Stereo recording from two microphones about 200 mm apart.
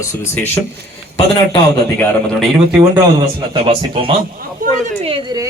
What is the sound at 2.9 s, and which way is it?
A man's voice, 25° right (ahead or behind).